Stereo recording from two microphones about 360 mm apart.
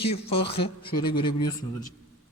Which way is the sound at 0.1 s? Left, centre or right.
Centre.